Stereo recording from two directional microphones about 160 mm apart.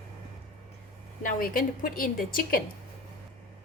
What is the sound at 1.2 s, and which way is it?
A woman's voice, 60° left (ahead or behind).